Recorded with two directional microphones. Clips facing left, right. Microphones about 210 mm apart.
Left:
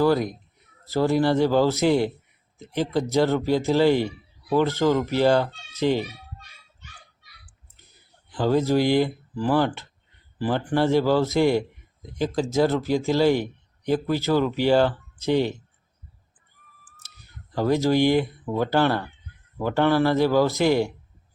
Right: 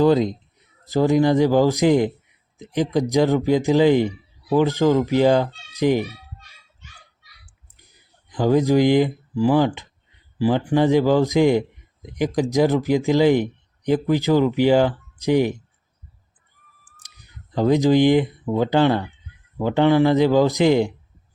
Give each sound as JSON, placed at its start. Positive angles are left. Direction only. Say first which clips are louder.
{"t": 0.0, "sound": "speech", "louder": "right 4 dB", "side_deg": -20}
{"t": 7.4, "sound": "a sound", "louder": "right 1 dB", "side_deg": -15}
{"t": 10.3, "sound": "speech", "louder": "right 5 dB", "side_deg": -10}
{"t": 17.0, "sound": "speech", "louder": "right 1 dB", "side_deg": -15}